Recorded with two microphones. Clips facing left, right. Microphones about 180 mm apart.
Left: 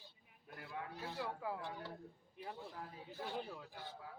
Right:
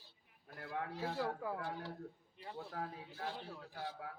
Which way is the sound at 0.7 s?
90° right.